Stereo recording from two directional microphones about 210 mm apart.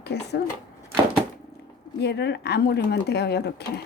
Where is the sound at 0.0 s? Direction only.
50° left (ahead or behind).